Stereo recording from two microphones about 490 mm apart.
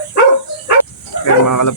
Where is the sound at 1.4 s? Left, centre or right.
Left.